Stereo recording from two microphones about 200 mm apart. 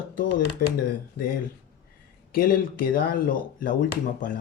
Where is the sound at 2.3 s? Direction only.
45° left (ahead or behind).